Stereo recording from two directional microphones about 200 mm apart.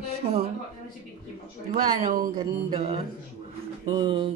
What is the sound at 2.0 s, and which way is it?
Speech, 40° right (ahead or behind).